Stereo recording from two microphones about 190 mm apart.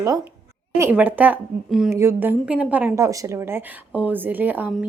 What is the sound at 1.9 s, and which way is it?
A woman's voice, 15° right (ahead or behind).